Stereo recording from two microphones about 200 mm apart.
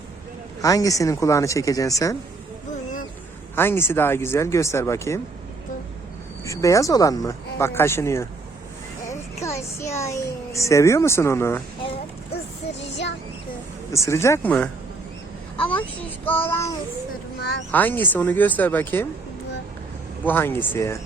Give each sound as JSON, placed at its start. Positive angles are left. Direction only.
{"t": 0.6, "sound": "speech", "side_deg": 15}
{"t": 3.5, "sound": "speech", "side_deg": 10}
{"t": 6.4, "sound": "speech", "side_deg": 15}
{"t": 9.0, "sound": "music", "side_deg": 15}
{"t": 10.0, "sound": "speech", "side_deg": 15}
{"t": 12.8, "sound": "child singing", "side_deg": 35}
{"t": 13.9, "sound": "speech", "side_deg": 15}
{"t": 16.2, "sound": "speech", "side_deg": 10}
{"t": 20.2, "sound": "speech", "side_deg": 10}